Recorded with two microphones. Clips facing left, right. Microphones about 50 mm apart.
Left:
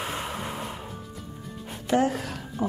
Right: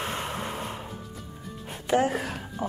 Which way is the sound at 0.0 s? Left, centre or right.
Centre.